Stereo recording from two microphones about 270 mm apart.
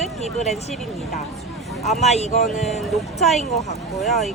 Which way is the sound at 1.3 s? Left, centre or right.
Centre.